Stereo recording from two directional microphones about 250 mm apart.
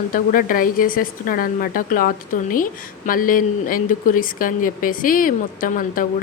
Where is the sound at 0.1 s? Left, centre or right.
Left.